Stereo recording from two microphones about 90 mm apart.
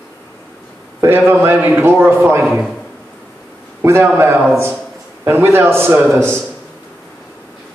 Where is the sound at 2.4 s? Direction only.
5° right (ahead or behind).